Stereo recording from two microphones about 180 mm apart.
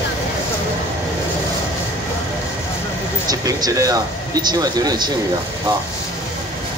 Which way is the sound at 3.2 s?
20° right (ahead or behind).